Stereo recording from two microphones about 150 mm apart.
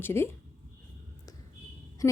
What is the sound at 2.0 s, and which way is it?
Speech, 10° left (ahead or behind).